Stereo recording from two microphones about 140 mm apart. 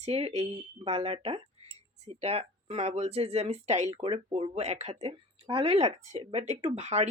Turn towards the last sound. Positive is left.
turn(degrees=-50)  # may be behind; listen again after turning